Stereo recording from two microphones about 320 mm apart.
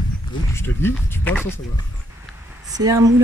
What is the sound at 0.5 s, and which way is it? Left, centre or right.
Speech, centre.